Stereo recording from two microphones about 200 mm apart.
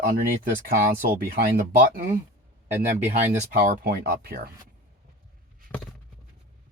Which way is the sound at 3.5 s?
45° right (ahead or behind).